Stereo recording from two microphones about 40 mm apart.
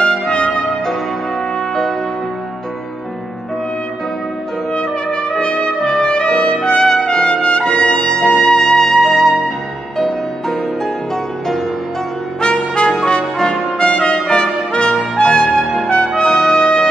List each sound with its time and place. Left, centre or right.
0.5 s music: centre
4.7 s trumpet: left
7.7 s music: centre
12.4 s trumpet: left
12.9 s brass instrument: centre
13.7 s trumpet: left
15.2 s music: centre
16.2 s trumpet: centre